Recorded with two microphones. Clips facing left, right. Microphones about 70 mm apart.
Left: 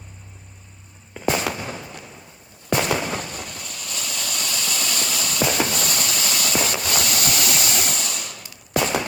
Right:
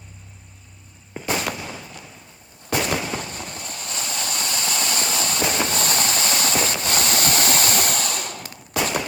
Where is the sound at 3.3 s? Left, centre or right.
Right.